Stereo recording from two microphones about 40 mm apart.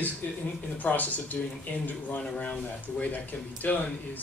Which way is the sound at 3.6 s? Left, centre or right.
Left.